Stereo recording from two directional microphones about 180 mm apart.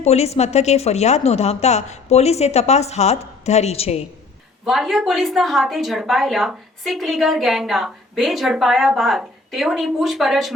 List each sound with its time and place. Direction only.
0.0 s speech: 35° left (ahead or behind)
4.6 s a woman's voice: centre (ahead or behind)